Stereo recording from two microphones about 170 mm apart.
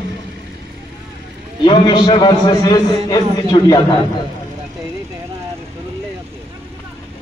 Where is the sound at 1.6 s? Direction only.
25° left (ahead or behind).